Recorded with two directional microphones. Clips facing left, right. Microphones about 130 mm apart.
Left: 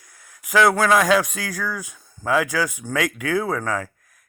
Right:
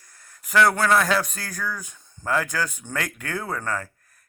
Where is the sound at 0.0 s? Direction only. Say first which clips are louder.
Left 2 dB; 10° left (ahead or behind).